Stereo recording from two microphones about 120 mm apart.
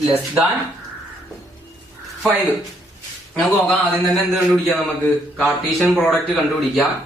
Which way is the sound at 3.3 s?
5° left (ahead or behind).